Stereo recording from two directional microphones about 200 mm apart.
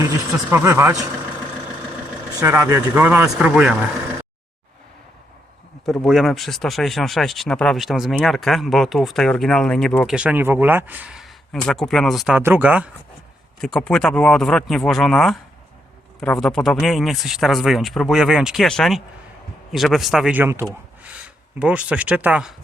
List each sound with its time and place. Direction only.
0.5 s speech: 15° right (ahead or behind)
2.4 s speech: 15° right (ahead or behind)
5.8 s speech: centre (ahead or behind)
10.2 s speech: 10° right (ahead or behind)
13.6 s speech: 5° left (ahead or behind)